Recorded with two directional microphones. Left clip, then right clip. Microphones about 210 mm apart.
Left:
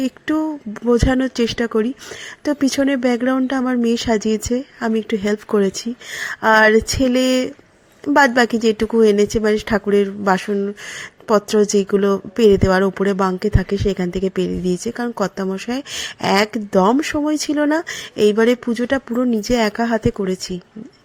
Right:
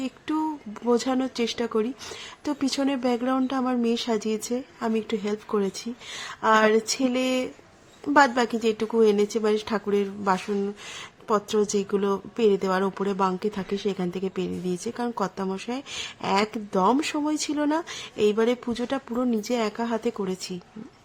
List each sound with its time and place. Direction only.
0.0 s speech: 20° left (ahead or behind)